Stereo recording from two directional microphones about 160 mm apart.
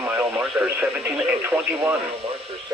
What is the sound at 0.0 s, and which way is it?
Speech, 10° right (ahead or behind).